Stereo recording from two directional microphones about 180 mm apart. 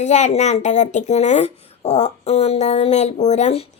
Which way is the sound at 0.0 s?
40° left (ahead or behind).